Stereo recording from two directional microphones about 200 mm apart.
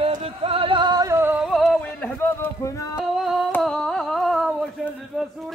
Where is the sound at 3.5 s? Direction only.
5° left (ahead or behind).